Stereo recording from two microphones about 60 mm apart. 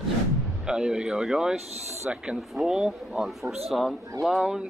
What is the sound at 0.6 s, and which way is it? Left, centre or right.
Speech, centre.